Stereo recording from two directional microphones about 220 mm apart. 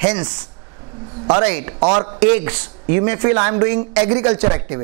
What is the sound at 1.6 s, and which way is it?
A man's voice, 25° right (ahead or behind).